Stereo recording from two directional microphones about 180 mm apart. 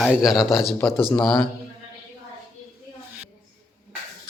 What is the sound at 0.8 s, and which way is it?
Speech, 10° left (ahead or behind).